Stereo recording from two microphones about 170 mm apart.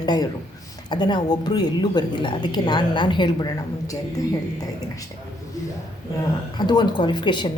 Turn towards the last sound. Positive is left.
turn(degrees=30)  # may be behind; listen again after turning